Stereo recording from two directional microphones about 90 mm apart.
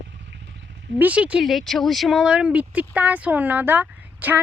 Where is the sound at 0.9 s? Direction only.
15° right (ahead or behind).